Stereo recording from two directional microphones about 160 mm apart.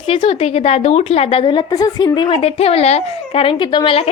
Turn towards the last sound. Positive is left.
turn(degrees=35)  # may be behind; listen again after turning